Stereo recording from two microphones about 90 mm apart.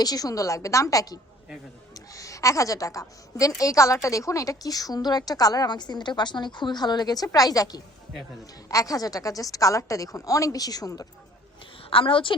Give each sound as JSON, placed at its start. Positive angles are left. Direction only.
{"t": 0.0, "sound": "a woman's voice", "side_deg": 45}
{"t": 11.8, "sound": "a woman's voice", "side_deg": 85}